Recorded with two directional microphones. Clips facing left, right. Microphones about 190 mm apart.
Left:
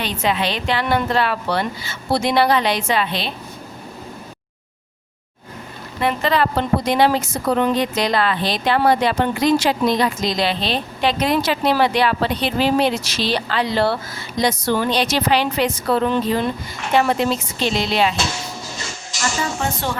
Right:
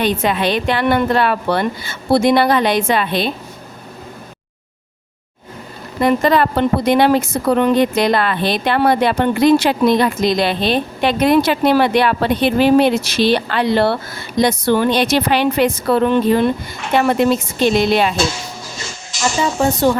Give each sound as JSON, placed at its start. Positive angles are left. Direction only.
{"t": 0.0, "sound": "a woman's voice", "side_deg": -50}
{"t": 6.0, "sound": "a woman's voice", "side_deg": -45}